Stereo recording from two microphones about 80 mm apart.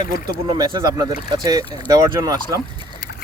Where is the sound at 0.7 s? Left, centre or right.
Right.